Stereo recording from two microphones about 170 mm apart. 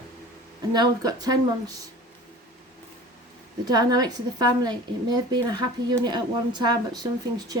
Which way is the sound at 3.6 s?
25° right (ahead or behind).